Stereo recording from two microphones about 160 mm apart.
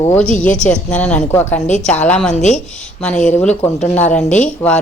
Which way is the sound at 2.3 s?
45° left (ahead or behind).